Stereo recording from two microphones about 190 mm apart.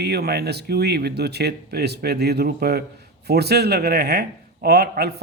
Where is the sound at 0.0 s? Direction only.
60° right (ahead or behind).